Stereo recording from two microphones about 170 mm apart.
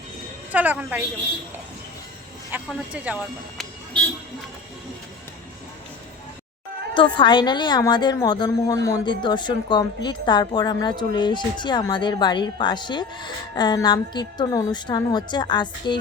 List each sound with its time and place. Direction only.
0.5 s speech: 10° right (ahead or behind)
2.5 s speech: 5° right (ahead or behind)
6.9 s a woman's voice: 30° left (ahead or behind)